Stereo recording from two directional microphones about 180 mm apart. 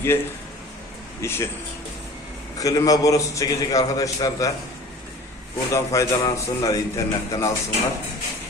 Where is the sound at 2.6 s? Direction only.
20° left (ahead or behind).